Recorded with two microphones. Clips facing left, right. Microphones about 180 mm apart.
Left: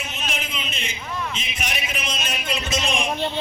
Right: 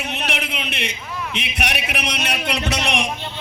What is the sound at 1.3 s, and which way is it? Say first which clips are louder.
A man's voice: right 5 dB; 65° right (ahead or behind).